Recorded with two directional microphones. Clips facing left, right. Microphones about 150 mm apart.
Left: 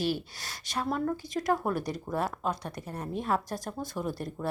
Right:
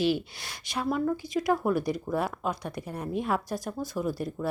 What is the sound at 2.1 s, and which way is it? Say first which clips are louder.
Speech: left 2 dB; 10° right (ahead or behind).